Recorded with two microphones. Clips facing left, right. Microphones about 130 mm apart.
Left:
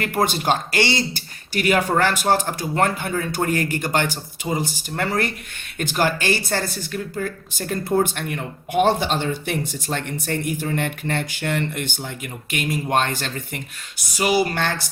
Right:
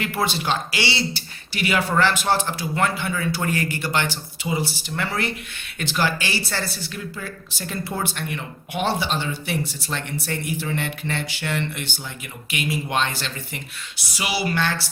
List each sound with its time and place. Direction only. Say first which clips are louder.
0.0 s speech: left 3 dB; 45° left (ahead or behind)